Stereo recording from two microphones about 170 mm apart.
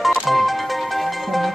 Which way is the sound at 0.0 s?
Centre (ahead or behind).